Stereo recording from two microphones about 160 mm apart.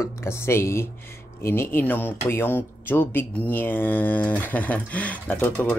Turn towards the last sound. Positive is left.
turn(degrees=10)  # may be behind; listen again after turning